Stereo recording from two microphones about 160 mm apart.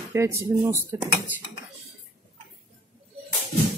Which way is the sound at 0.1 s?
15° right (ahead or behind).